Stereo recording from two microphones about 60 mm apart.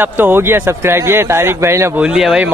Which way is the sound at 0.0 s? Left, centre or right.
Right.